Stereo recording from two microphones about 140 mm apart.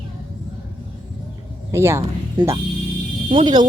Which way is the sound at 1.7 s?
20° right (ahead or behind).